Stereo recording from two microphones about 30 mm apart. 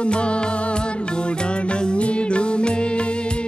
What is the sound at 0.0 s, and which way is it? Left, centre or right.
Music, left.